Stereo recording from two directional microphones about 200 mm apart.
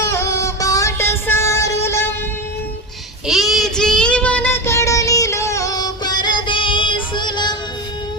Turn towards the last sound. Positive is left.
turn(degrees=20)  # may be behind; listen again after turning